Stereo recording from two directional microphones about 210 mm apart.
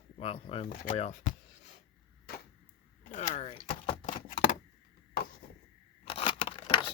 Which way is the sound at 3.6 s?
25° left (ahead or behind).